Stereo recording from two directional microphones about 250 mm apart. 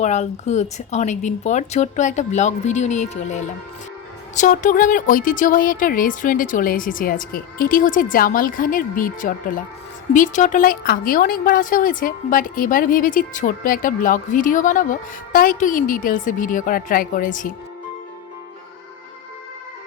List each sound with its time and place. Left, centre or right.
0.0 s a woman's voice: left